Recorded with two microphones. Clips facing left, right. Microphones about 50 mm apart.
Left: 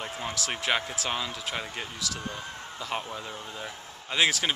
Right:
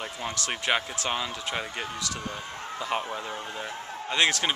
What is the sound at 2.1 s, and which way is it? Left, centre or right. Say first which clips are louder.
Speech: right 1 dB; centre.